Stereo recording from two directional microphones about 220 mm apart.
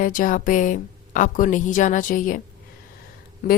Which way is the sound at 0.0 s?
40° left (ahead or behind).